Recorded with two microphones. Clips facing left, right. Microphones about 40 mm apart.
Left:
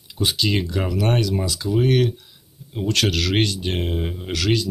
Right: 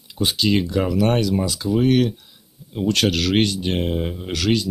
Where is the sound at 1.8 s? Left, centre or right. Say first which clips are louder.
Right 1 dB; centre.